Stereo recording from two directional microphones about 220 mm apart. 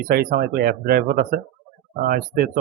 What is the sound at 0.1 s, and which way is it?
Speech, 45° right (ahead or behind).